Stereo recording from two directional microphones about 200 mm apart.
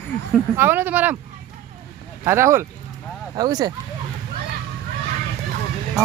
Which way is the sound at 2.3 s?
15° right (ahead or behind).